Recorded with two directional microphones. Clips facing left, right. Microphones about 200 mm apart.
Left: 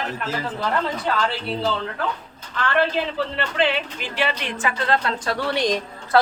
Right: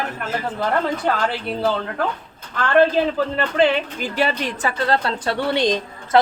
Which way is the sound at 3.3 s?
45° right (ahead or behind).